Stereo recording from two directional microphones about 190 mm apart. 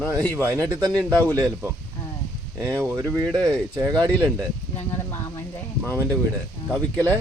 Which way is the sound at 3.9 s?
20° right (ahead or behind).